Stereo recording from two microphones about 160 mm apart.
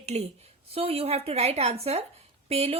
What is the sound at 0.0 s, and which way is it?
A woman's voice, 45° right (ahead or behind).